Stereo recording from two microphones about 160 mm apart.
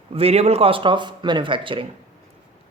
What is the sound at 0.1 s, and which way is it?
Speech, 40° right (ahead or behind).